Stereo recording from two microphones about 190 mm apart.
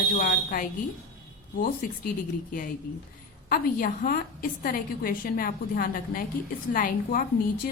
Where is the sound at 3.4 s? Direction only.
50° left (ahead or behind).